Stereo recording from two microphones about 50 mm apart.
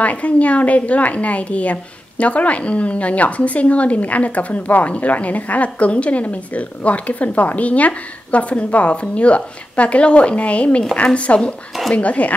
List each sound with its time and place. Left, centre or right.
0.0 s a woman's voice: left